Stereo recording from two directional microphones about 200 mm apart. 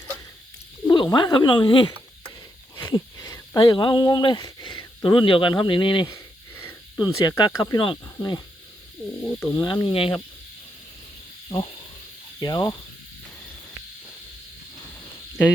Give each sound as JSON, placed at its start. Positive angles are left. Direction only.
{"t": 0.9, "sound": "speech", "side_deg": 25}
{"t": 6.1, "sound": "wheeze", "side_deg": 10}
{"t": 7.0, "sound": "speech", "side_deg": 20}
{"t": 9.4, "sound": "speech", "side_deg": 15}
{"t": 9.8, "sound": "speech", "side_deg": 25}
{"t": 11.4, "sound": "speech", "side_deg": 20}